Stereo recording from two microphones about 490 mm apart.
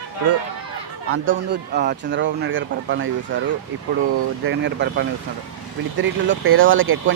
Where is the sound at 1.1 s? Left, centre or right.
Right.